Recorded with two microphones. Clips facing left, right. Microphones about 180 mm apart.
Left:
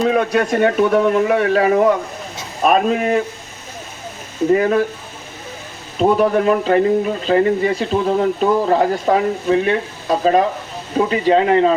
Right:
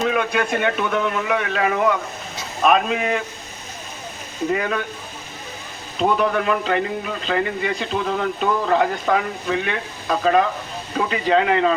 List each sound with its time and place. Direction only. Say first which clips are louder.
0.1 s speech: left 5 dB; 35° left (ahead or behind)
4.5 s speech: left 10 dB; 35° left (ahead or behind)
6.1 s speech: left 6 dB; 35° left (ahead or behind)